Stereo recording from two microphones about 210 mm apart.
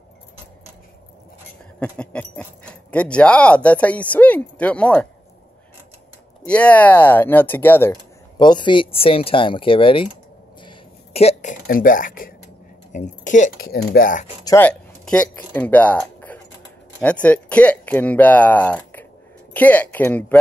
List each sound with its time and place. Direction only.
1.8 s speech: 5° left (ahead or behind)
6.4 s speech: 5° left (ahead or behind); by 10.0 s 25° left (ahead or behind)
10.6 s a sound: 25° left (ahead or behind)
11.6 s speech: 40° left (ahead or behind)
14.4 s speech: 10° left (ahead or behind)